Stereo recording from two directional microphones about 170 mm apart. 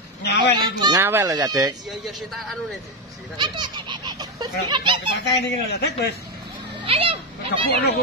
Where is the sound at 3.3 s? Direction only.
25° right (ahead or behind).